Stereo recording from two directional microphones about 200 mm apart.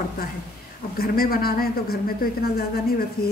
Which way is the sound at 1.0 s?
50° left (ahead or behind).